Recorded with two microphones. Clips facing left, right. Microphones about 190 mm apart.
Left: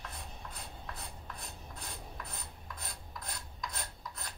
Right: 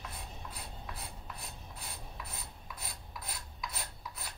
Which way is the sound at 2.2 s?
5° right (ahead or behind).